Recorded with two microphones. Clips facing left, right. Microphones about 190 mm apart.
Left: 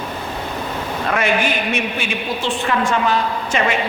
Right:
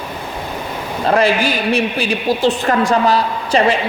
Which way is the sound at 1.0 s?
35° right (ahead or behind).